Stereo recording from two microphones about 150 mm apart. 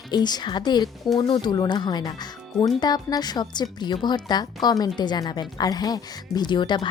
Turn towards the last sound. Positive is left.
turn(degrees=30)  # may be behind; listen again after turning